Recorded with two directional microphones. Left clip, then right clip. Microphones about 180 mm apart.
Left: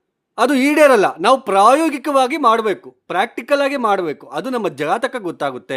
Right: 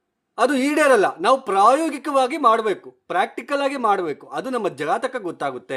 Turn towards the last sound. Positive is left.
turn(degrees=35)  # may be behind; listen again after turning